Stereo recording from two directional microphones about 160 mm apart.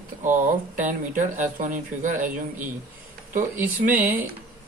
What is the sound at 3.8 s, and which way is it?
Speech, 60° right (ahead or behind).